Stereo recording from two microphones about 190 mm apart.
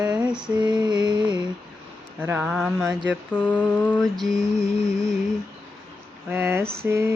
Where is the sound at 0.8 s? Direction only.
25° right (ahead or behind).